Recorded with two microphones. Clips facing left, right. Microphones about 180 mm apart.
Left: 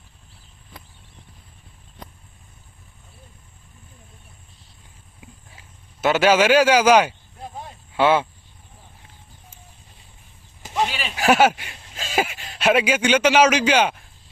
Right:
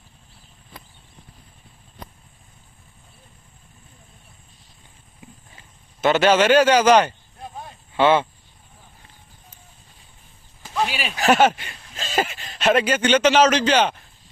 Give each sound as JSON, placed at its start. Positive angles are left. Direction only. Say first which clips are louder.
{"t": 5.2, "sound": "a sound", "louder": "right 1 dB", "side_deg": 5}
{"t": 7.9, "sound": "speech", "louder": "right 1 dB", "side_deg": 10}
{"t": 11.2, "sound": "speech", "louder": "even", "side_deg": 10}